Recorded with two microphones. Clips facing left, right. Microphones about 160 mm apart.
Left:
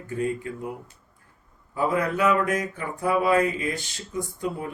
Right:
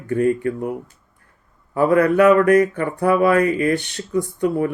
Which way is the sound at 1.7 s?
65° right (ahead or behind).